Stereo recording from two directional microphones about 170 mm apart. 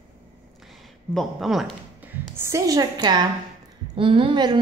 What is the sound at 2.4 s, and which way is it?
A woman's voice, 20° right (ahead or behind).